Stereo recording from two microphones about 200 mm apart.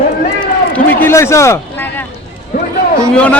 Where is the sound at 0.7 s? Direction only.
10° left (ahead or behind).